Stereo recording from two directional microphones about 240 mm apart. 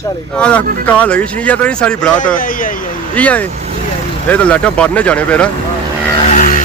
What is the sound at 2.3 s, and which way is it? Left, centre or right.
Speech, left.